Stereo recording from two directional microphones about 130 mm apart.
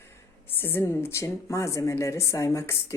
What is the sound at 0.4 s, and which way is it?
Speech, 15° left (ahead or behind).